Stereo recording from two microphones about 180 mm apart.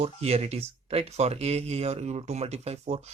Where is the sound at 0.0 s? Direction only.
35° right (ahead or behind).